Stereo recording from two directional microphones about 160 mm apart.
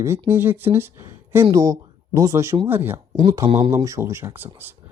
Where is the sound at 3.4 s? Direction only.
40° right (ahead or behind).